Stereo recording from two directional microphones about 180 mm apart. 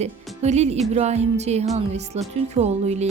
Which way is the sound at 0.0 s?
40° right (ahead or behind).